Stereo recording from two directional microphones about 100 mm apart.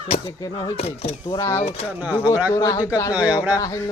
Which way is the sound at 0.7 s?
80° left.